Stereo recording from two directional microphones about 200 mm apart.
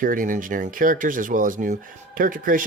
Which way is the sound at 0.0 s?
45° right (ahead or behind).